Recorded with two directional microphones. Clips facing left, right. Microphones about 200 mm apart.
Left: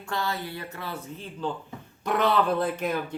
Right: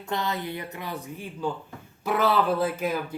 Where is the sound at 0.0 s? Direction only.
20° right (ahead or behind).